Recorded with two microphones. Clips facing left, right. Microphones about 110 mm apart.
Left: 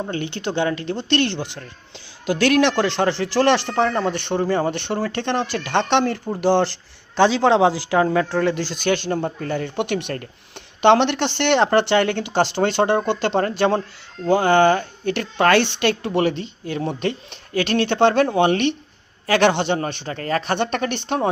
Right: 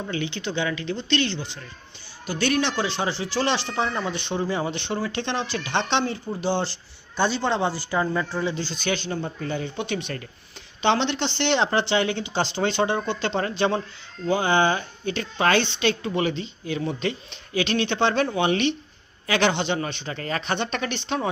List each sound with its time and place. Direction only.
0.0 s speech: 50° left (ahead or behind); by 1.6 s 65° left (ahead or behind)
2.2 s speech: 90° left; by 6.2 s 60° left (ahead or behind)
6.4 s speech: 75° left (ahead or behind)
7.2 s speech: 90° left
8.1 s speech: 75° left (ahead or behind)
8.8 s speech: 45° left (ahead or behind)
14.3 s speech: 60° left (ahead or behind)